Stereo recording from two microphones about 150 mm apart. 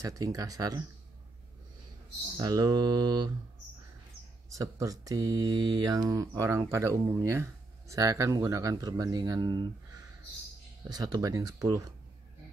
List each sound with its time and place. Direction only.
0.0 s speech: 25° right (ahead or behind)
2.3 s speech: 25° right (ahead or behind)
4.6 s speech: 20° right (ahead or behind)
10.9 s speech: 25° right (ahead or behind)